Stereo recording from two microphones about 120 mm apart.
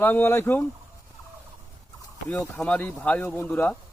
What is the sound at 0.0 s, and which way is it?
Speech, 15° left (ahead or behind).